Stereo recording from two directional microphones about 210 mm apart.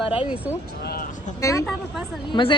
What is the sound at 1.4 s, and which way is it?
Speech, 15° left (ahead or behind).